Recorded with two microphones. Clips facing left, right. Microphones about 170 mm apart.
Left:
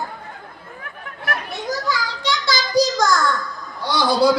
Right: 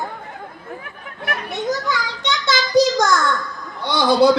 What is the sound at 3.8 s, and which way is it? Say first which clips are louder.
Speech: right 3 dB; 20° right (ahead or behind).